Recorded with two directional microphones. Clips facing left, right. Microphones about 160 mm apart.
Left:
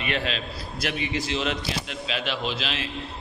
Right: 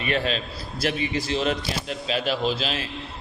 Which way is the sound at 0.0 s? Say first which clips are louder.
Right 3 dB; 40° right (ahead or behind).